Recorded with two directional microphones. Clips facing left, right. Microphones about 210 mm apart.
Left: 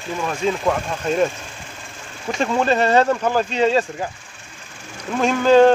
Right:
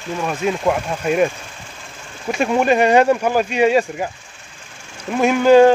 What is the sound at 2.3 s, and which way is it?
Speech, 10° right (ahead or behind).